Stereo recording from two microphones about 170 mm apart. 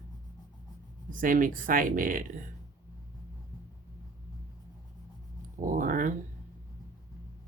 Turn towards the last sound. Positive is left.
turn(degrees=-50)  # may be behind; listen again after turning